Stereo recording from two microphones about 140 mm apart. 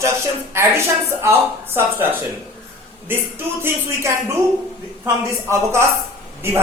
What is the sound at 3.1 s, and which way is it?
A woman's voice, 15° right (ahead or behind).